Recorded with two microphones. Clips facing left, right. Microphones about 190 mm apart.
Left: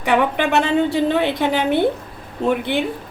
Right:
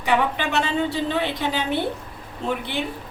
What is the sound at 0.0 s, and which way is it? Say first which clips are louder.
A woman's voice: left 4 dB; 55° left (ahead or behind).